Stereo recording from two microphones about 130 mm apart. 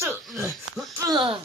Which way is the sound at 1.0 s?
40° right (ahead or behind).